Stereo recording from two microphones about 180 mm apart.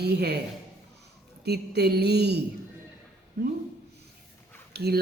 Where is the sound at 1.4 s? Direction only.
65° right (ahead or behind).